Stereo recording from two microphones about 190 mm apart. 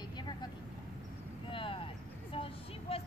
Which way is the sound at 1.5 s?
25° left (ahead or behind).